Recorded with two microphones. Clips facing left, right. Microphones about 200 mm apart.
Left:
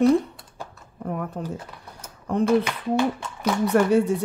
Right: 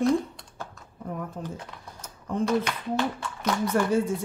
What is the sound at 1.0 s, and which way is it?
Speech, 70° left (ahead or behind).